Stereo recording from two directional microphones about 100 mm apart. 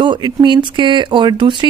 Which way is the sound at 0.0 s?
50° right (ahead or behind).